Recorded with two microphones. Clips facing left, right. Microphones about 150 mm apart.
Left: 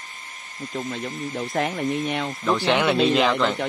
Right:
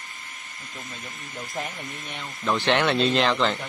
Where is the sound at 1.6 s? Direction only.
65° left (ahead or behind).